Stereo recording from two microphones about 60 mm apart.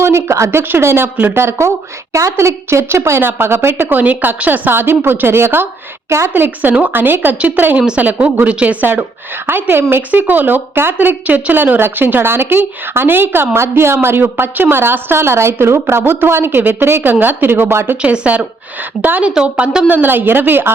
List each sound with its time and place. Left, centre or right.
0.0 s a woman's voice: right
0.7 s speech: right
1.4 s a woman's voice: right
6.3 s speech: right
7.8 s a woman's voice: centre
8.0 s speech: right
18.0 s a woman's voice: centre
19.9 s speech: right